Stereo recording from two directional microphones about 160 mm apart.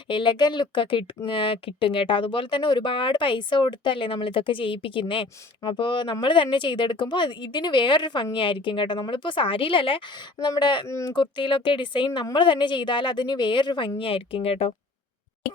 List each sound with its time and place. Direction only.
0.1 s speech: 30° left (ahead or behind)